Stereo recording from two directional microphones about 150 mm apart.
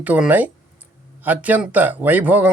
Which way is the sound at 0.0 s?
10° right (ahead or behind).